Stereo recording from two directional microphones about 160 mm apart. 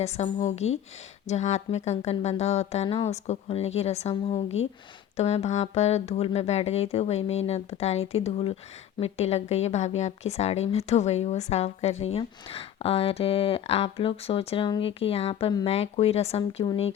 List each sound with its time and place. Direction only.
0.0 s speech: 45° left (ahead or behind)